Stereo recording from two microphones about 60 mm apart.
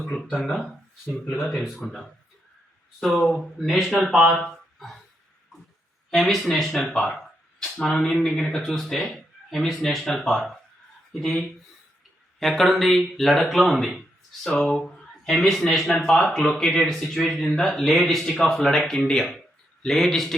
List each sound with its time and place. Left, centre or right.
0.0 s speech: centre
6.1 s speech: centre
9.0 s a sound: centre
9.6 s speech: centre
18.9 s speech: centre